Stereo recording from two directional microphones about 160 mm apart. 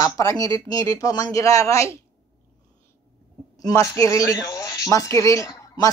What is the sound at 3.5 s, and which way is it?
A woman's voice, 20° left (ahead or behind).